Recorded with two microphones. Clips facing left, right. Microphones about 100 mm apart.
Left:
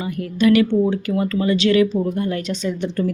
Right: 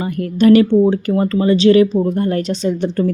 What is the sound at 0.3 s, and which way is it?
Speech, 35° right (ahead or behind).